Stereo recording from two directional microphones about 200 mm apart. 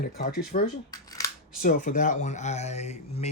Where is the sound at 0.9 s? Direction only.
20° left (ahead or behind).